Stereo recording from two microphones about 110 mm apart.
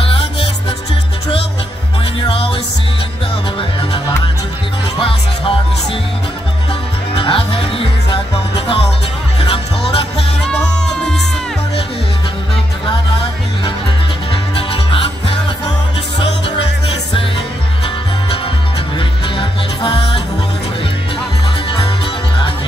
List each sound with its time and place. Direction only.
0.1 s music: 55° left (ahead or behind)
2.2 s music: 55° left (ahead or behind)
4.9 s music: 50° left (ahead or behind)
7.2 s music: 60° left (ahead or behind)
14.3 s music: 55° left (ahead or behind)
18.9 s music: 50° left (ahead or behind)
21.6 s music: 55° left (ahead or behind)